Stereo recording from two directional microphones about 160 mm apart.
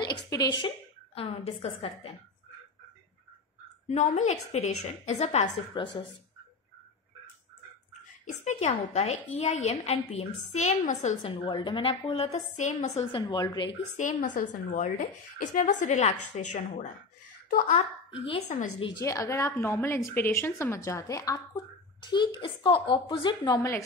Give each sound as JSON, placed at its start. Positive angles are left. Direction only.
{"t": 0.0, "sound": "a woman's voice", "side_deg": 25}
{"t": 3.8, "sound": "a woman's voice", "side_deg": 45}
{"t": 5.7, "sound": "a woman's voice", "side_deg": 30}
{"t": 8.3, "sound": "a woman's voice", "side_deg": 45}
{"t": 11.2, "sound": "a woman's voice", "side_deg": 30}
{"t": 12.4, "sound": "a woman's voice", "side_deg": 50}
{"t": 13.1, "sound": "a woman's voice", "side_deg": 25}
{"t": 13.8, "sound": "a woman's voice", "side_deg": 50}
{"t": 18.8, "sound": "a woman's voice", "side_deg": 30}
{"t": 19.0, "sound": "a woman's voice", "side_deg": 20}